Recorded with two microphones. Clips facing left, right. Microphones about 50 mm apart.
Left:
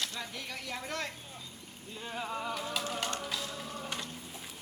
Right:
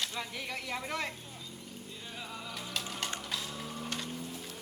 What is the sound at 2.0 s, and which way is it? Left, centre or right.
Music, left.